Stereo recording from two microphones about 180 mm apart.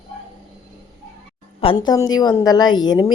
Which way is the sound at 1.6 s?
25° left (ahead or behind).